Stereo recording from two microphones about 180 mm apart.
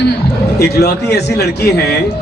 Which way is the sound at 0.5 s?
60° left (ahead or behind).